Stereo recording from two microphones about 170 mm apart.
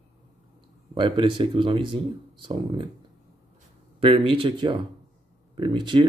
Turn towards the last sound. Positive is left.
turn(degrees=-30)  # may be behind; listen again after turning